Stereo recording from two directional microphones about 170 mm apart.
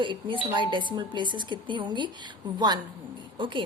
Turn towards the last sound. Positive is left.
turn(degrees=-30)  # may be behind; listen again after turning